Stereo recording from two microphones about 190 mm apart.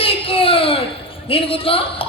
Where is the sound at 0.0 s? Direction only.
30° left (ahead or behind).